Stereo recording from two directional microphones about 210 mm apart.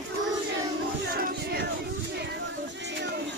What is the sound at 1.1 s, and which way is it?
Music, 45° right (ahead or behind).